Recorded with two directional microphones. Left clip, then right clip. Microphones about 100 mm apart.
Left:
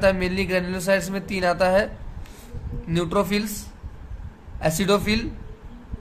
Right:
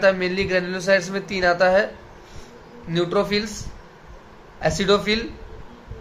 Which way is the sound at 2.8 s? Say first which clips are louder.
Right 2 dB; 55° left (ahead or behind).